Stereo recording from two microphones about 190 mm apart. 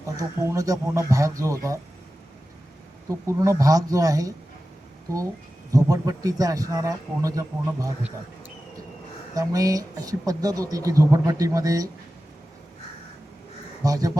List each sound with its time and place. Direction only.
0.2 s speech: 20° right (ahead or behind)
3.1 s speech: 15° right (ahead or behind)
5.7 s speech: 20° right (ahead or behind)
9.3 s speech: 20° right (ahead or behind)
13.8 s speech: 20° right (ahead or behind)